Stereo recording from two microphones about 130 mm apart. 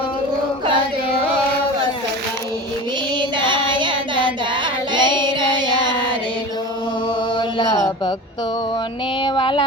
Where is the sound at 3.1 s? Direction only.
35° right (ahead or behind).